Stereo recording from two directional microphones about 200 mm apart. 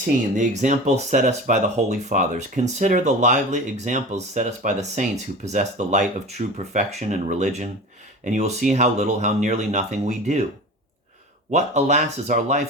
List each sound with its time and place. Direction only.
0.3 s speech: 35° right (ahead or behind)
11.5 s speech: 35° right (ahead or behind)